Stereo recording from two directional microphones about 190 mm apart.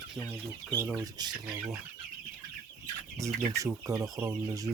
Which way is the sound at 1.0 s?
20° right (ahead or behind).